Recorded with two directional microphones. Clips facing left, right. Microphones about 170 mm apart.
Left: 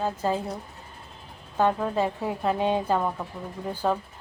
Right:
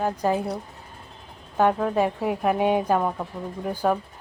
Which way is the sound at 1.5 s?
15° right (ahead or behind).